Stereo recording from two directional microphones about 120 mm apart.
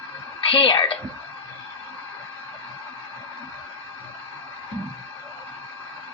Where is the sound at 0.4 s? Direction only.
50° left (ahead or behind).